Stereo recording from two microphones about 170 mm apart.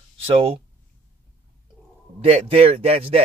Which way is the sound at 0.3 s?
35° right (ahead or behind).